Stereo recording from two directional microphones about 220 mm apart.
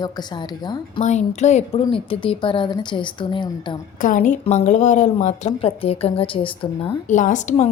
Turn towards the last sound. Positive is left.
turn(degrees=35)  # may be behind; listen again after turning